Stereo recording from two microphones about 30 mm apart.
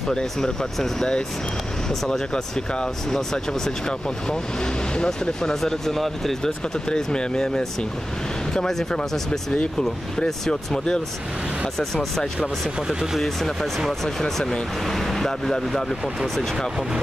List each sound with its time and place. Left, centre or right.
0.1 s speech: left
1.9 s speech: centre
4.9 s speech: left
5.6 s speech: centre
7.1 s speech: left
9.8 s speech: centre
11.8 s speech: centre
12.8 s speech: centre
13.2 s speech: centre
14.9 s speech: centre